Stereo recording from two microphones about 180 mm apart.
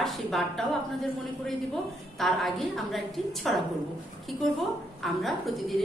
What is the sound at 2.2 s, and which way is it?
A woman's voice, centre (ahead or behind).